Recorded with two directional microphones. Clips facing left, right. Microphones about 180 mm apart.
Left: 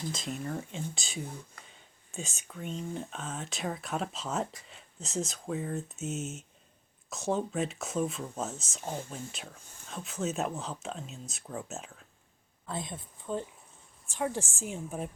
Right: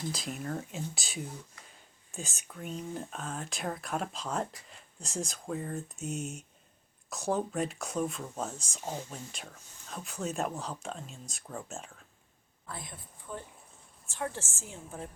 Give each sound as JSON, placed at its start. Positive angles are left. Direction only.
{"t": 0.1, "sound": "speech", "side_deg": 0}
{"t": 8.8, "sound": "speech", "side_deg": -10}
{"t": 9.1, "sound": "speech", "side_deg": 5}
{"t": 12.6, "sound": "a woman's voice", "side_deg": 20}